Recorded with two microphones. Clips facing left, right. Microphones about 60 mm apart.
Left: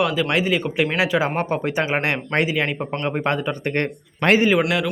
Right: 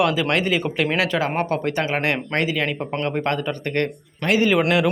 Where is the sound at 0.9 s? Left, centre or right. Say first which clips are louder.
Left 1 dB; centre.